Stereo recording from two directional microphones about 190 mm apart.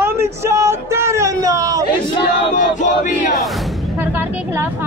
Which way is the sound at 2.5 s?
40° left (ahead or behind).